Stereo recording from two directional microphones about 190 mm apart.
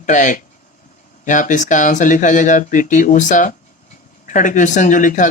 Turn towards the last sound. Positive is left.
turn(degrees=40)  # may be behind; listen again after turning